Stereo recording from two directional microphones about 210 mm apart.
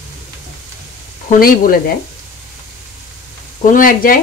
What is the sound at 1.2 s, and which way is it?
Speech, 40° left (ahead or behind).